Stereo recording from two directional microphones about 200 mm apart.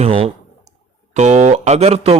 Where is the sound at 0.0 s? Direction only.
30° right (ahead or behind).